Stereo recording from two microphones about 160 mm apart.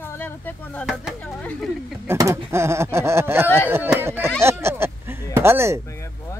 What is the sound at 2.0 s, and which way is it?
Speech, 20° right (ahead or behind).